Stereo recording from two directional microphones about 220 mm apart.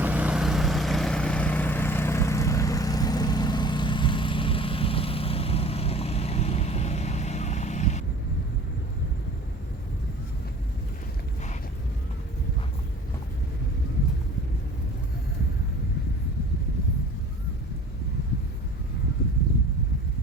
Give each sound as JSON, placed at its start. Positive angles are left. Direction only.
{"t": 0.0, "sound": "vehicle", "side_deg": -5}